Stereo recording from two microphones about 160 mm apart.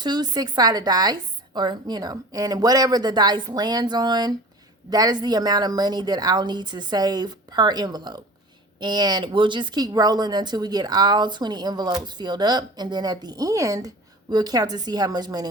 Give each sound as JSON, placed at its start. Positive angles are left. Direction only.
{"t": 0.0, "sound": "speech", "side_deg": -25}